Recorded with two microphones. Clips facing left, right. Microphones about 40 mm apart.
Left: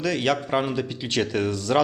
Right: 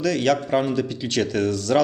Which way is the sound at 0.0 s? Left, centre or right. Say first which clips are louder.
Right 3 dB; centre.